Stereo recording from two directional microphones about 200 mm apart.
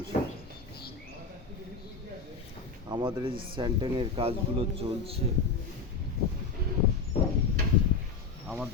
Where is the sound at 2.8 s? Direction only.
25° right (ahead or behind).